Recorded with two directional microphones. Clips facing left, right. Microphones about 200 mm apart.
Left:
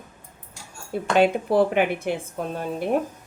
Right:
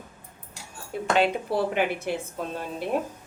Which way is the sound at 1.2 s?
50° left (ahead or behind).